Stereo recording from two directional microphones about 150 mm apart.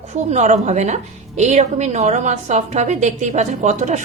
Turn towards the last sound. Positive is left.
turn(degrees=-50)  # may be behind; listen again after turning